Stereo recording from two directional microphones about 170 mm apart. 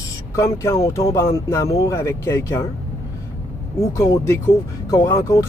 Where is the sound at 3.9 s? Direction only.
20° left (ahead or behind).